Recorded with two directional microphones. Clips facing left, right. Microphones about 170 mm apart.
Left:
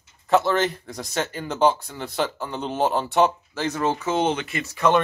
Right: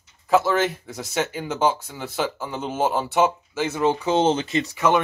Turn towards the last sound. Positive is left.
turn(degrees=-5)  # may be behind; listen again after turning